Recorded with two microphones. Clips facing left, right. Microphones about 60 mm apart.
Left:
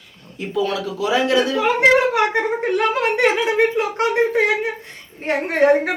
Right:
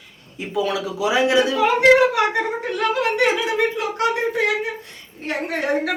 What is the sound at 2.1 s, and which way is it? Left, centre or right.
A woman's voice, left.